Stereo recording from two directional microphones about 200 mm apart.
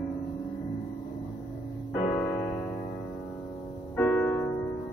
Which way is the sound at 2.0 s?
15° left (ahead or behind).